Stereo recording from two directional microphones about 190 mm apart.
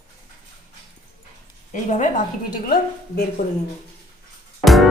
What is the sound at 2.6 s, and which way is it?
Speech, 55° left (ahead or behind).